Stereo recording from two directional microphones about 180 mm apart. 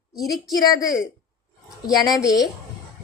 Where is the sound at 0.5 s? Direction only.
20° left (ahead or behind).